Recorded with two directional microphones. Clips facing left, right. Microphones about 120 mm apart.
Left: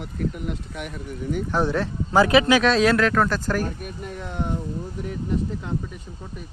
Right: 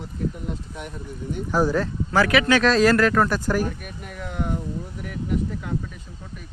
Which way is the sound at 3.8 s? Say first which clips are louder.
Left 4 dB; 35° left (ahead or behind).